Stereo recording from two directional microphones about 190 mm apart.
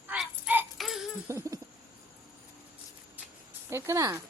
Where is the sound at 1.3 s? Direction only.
15° right (ahead or behind).